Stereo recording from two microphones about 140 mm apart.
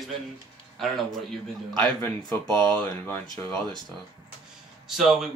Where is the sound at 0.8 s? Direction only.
Centre (ahead or behind).